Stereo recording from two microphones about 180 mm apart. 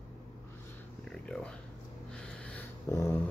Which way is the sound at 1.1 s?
5° left (ahead or behind).